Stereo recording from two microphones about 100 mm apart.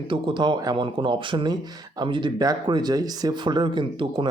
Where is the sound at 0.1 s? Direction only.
50° right (ahead or behind).